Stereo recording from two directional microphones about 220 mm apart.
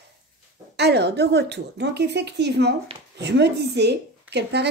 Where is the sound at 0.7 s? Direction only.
50° right (ahead or behind).